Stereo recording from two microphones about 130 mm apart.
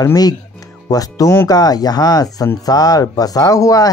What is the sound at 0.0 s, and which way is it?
Speech, 30° left (ahead or behind).